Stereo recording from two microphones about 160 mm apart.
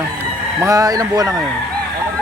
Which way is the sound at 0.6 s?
20° right (ahead or behind).